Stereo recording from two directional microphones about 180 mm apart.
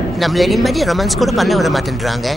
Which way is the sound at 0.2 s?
Centre (ahead or behind).